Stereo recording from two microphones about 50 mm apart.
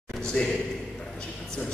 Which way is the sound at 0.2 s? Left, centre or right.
Centre.